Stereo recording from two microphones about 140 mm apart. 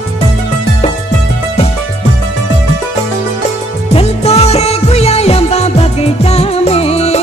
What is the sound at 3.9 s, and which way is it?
Music, 45° left (ahead or behind).